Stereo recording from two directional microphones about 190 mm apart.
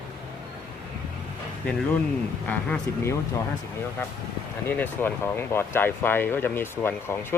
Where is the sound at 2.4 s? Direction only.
10° left (ahead or behind).